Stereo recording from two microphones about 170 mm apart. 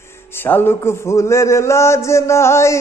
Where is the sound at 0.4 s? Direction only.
10° left (ahead or behind).